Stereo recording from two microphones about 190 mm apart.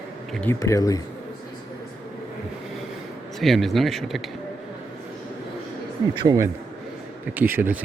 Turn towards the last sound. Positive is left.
turn(degrees=-10)  # may be behind; listen again after turning